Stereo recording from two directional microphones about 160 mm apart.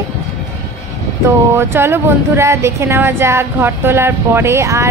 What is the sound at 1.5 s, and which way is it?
Speech, 15° right (ahead or behind).